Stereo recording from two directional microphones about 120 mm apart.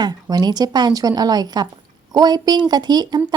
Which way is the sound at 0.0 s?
35° right (ahead or behind).